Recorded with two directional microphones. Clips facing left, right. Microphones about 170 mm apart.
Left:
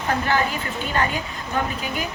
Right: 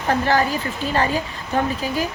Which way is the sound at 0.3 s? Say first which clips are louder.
Right 3 dB; 35° right (ahead or behind).